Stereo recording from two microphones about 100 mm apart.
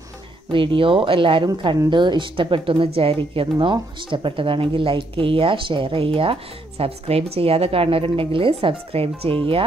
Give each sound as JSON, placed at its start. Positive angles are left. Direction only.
{"t": 0.5, "sound": "speech", "side_deg": -55}
{"t": 3.5, "sound": "speech", "side_deg": -50}